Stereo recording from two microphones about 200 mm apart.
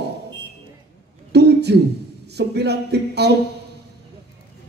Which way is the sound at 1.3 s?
55° right (ahead or behind).